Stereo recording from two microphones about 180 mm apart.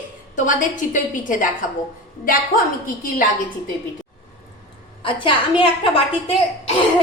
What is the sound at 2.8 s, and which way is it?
Speech, 50° left (ahead or behind).